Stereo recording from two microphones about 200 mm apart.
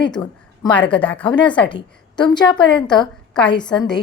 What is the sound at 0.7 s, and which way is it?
Speech, 5° left (ahead or behind).